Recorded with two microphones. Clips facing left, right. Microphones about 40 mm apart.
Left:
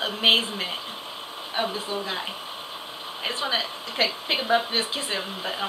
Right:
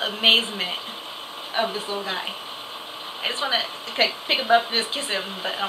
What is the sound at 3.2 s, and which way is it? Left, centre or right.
Speech, centre.